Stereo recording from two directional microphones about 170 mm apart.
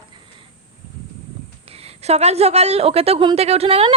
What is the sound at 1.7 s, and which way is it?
A woman's voice, 35° right (ahead or behind).